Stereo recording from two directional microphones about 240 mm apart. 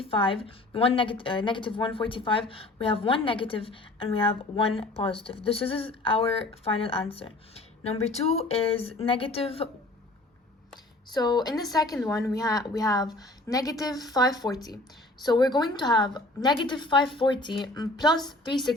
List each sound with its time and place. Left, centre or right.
0.0 s a woman's voice: left
11.1 s a woman's voice: centre